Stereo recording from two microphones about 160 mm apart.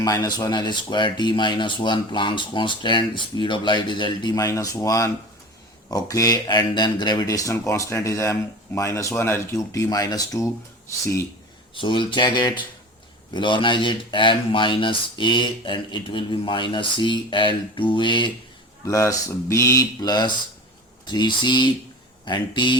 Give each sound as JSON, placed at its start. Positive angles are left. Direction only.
{"t": 0.0, "sound": "speech", "side_deg": 25}
{"t": 11.7, "sound": "speech", "side_deg": 30}
{"t": 18.9, "sound": "speech", "side_deg": 20}